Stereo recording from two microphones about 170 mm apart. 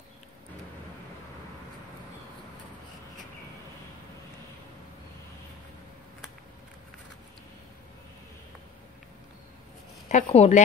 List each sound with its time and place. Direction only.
10.0 s a woman's voice: 40° left (ahead or behind)